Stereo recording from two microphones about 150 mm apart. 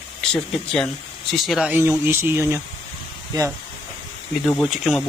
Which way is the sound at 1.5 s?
5° right (ahead or behind).